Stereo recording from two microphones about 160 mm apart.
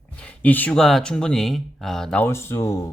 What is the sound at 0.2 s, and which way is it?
Speech, 10° left (ahead or behind).